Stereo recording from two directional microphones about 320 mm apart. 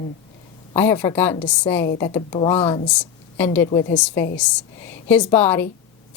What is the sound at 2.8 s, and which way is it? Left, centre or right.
A woman's voice, centre.